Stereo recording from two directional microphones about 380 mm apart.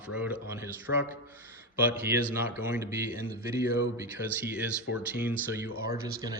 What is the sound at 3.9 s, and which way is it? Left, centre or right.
Speech, centre.